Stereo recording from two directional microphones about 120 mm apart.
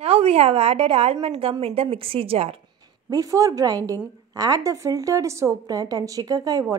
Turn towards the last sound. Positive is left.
turn(degrees=-30)  # may be behind; listen again after turning